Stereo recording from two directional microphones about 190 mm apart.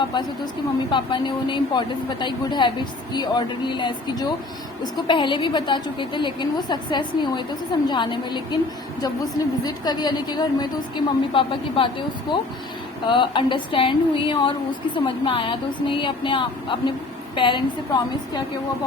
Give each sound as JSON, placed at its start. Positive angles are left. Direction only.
{"t": 0.9, "sound": "a woman's voice", "side_deg": 25}